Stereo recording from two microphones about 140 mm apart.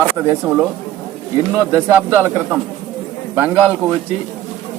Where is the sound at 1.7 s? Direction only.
15° right (ahead or behind).